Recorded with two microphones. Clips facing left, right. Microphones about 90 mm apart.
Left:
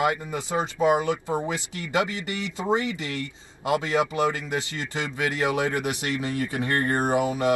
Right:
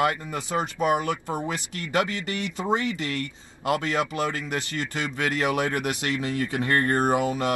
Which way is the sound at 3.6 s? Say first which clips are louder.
Left 1 dB; 15° left (ahead or behind).